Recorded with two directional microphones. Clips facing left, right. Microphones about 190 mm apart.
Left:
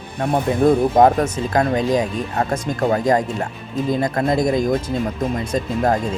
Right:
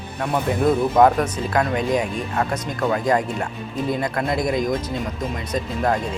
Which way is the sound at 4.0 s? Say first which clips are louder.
Left 4 dB; 25° left (ahead or behind).